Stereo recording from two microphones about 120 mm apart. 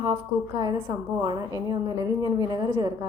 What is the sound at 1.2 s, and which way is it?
A woman's voice, 30° right (ahead or behind).